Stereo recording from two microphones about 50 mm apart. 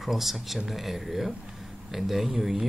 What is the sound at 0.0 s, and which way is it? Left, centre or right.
Speech, centre.